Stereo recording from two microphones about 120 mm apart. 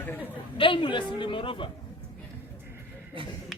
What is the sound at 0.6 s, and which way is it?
Speech, 45° left (ahead or behind).